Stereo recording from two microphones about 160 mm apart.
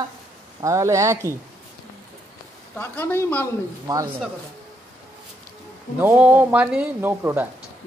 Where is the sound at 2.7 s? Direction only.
10° left (ahead or behind).